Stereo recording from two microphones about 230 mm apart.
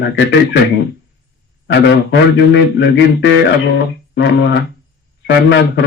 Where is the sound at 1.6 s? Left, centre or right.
Left.